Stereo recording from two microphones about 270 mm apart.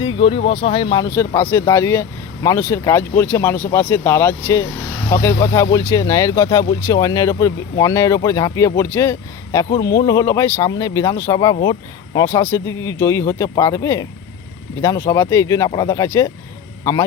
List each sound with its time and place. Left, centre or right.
0.0 s speech: centre